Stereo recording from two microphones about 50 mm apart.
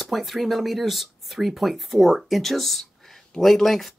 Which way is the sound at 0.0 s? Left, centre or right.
Centre.